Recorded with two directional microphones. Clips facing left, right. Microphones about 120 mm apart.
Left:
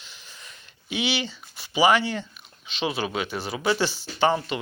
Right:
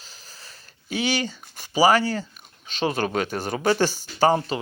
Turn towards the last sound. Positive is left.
turn(degrees=-35)  # may be behind; listen again after turning